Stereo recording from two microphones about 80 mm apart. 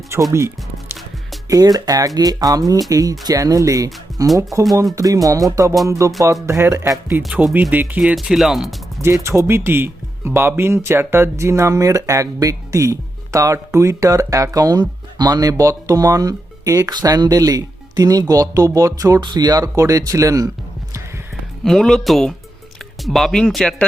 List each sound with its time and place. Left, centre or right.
0.1 s speech: right
1.5 s speech: right
7.5 s speech: right
8.0 s speech: centre
9.0 s speech: right
19.2 s speech: right
21.6 s speech: centre